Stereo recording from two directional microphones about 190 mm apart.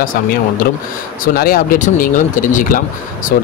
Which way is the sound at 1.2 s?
50° left (ahead or behind).